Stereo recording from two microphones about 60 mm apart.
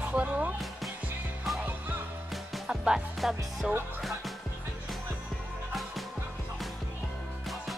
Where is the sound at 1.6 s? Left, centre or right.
Right.